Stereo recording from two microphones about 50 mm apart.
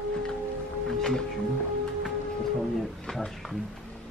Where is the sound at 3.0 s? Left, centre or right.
Centre.